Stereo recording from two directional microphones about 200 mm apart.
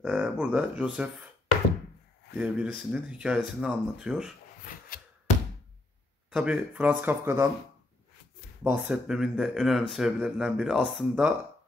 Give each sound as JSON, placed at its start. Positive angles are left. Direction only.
{"t": 0.0, "sound": "speech", "side_deg": -5}
{"t": 2.3, "sound": "speech", "side_deg": -10}
{"t": 4.6, "sound": "a sound", "side_deg": 45}
{"t": 6.3, "sound": "speech", "side_deg": -5}
{"t": 8.6, "sound": "speech", "side_deg": -5}